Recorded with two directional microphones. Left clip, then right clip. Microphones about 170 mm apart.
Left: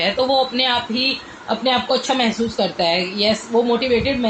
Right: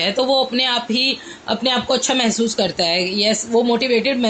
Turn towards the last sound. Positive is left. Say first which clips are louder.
# right 1 dB
turn(degrees=-45)  # may be behind; listen again after turning